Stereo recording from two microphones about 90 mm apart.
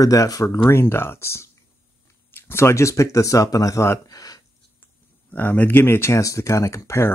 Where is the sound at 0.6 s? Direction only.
30° left (ahead or behind).